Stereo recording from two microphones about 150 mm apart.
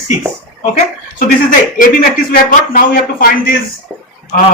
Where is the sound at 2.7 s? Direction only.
80° left.